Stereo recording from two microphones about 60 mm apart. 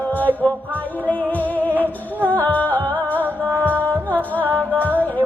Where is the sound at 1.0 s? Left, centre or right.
Left.